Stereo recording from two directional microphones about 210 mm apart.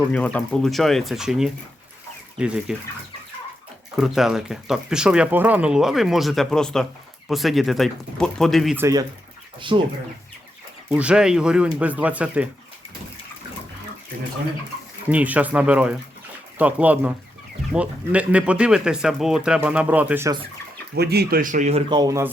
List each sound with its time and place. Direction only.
0.1 s speech: 5° left (ahead or behind)
2.7 s speech: 5° right (ahead or behind)
3.9 s speech: centre (ahead or behind)
8.8 s speech: 15° right (ahead or behind)
10.8 s speech: 5° right (ahead or behind)
15.1 s speech: 5° right (ahead or behind)
20.9 s speech: 50° right (ahead or behind); by 22.3 s 15° right (ahead or behind)